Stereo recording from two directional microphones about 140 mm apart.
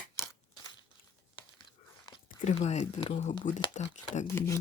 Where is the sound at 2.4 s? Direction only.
50° left (ahead or behind).